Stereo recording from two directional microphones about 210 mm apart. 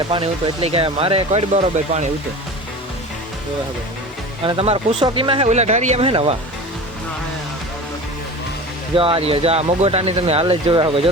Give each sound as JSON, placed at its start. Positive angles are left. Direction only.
{"t": 0.1, "sound": "speech", "side_deg": -25}
{"t": 4.4, "sound": "speech", "side_deg": -25}
{"t": 9.0, "sound": "speech", "side_deg": -25}